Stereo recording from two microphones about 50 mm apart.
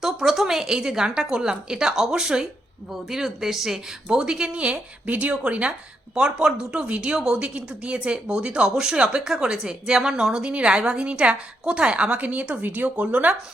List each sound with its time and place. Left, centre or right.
0.0 s a woman's voice: centre
4.2 s a woman's voice: centre
5.0 s a woman's voice: right